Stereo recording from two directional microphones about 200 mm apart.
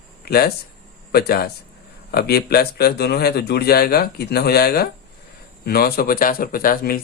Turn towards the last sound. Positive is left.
turn(degrees=45)  # may be behind; listen again after turning